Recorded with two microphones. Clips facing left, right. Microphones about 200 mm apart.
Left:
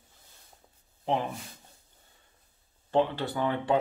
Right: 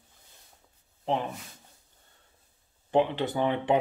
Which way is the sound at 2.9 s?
15° right (ahead or behind).